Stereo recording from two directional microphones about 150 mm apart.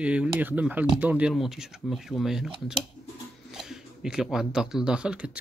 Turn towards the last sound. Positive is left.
turn(degrees=-5)  # may be behind; listen again after turning